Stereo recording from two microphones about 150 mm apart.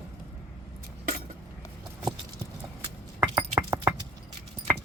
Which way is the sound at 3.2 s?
15° right (ahead or behind).